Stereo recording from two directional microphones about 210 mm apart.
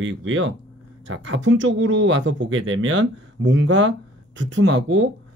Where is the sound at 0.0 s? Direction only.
70° right (ahead or behind).